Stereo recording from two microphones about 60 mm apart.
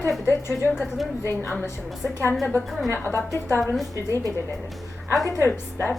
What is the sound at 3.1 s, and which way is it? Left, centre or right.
Speech, left.